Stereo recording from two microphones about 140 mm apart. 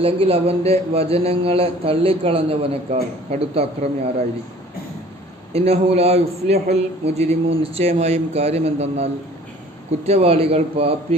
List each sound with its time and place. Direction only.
0.0 s a man's voice: 40° right (ahead or behind)
5.5 s a man's voice: 50° right (ahead or behind)
10.1 s a man's voice: 45° right (ahead or behind)